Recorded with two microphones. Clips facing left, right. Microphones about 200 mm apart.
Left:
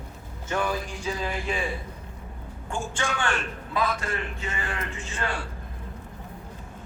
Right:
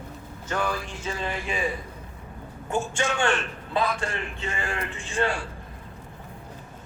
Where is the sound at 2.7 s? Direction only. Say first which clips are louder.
Right 4 dB; 20° right (ahead or behind).